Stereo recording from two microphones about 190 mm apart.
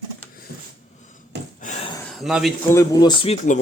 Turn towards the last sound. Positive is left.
turn(degrees=20)  # may be behind; listen again after turning